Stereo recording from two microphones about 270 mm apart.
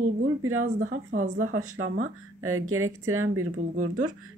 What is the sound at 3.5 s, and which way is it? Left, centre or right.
Speech, right.